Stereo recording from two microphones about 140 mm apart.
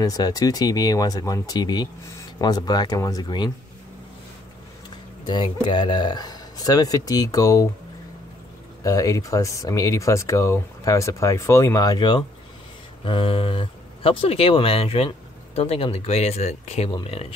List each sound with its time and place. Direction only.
0.0 s speech: 25° left (ahead or behind)
5.2 s speech: 35° left (ahead or behind)
8.8 s speech: 25° left (ahead or behind); by 17.3 s 45° left (ahead or behind)